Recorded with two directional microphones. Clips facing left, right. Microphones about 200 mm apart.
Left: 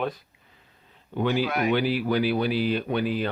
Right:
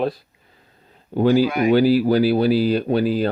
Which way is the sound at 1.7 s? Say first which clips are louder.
Right 10 dB; 35° right (ahead or behind).